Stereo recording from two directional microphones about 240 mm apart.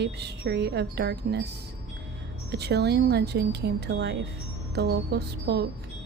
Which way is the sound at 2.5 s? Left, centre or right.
Right.